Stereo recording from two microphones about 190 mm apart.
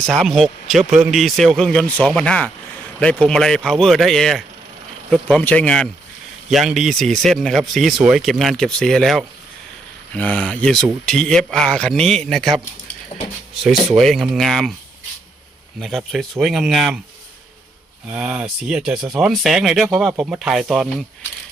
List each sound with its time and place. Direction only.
0.0 s speech: centre (ahead or behind)
13.1 s speech: 30° left (ahead or behind)
13.6 s speech: centre (ahead or behind)
15.8 s speech: centre (ahead or behind)
18.1 s speech: 5° right (ahead or behind)